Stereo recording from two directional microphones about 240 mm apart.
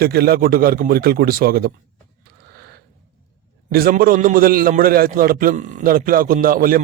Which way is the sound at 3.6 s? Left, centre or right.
Right.